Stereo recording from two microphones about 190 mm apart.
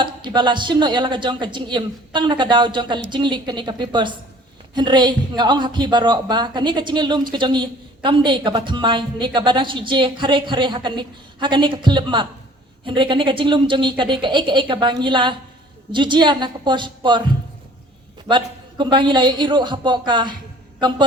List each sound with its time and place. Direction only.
0.0 s speech: 25° right (ahead or behind)